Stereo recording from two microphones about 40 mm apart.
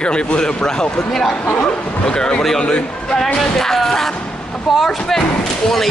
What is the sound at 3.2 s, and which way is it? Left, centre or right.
Speech, centre.